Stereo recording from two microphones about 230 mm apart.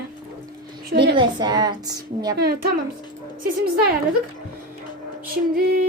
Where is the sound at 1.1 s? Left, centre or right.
Centre.